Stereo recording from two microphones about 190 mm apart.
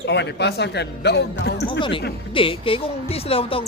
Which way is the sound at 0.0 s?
65° left (ahead or behind).